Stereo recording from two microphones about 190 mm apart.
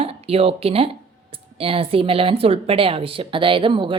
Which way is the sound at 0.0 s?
30° right (ahead or behind).